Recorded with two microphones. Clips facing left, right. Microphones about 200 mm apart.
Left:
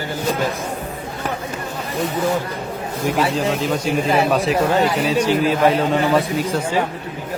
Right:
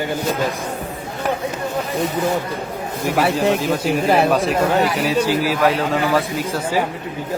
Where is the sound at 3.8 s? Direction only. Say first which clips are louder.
Right 1 dB; 60° right (ahead or behind).